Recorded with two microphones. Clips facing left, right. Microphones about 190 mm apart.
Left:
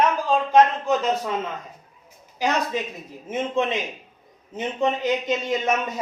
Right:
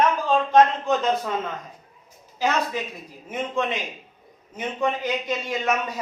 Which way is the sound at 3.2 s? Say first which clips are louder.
Left 2 dB; 25° left (ahead or behind).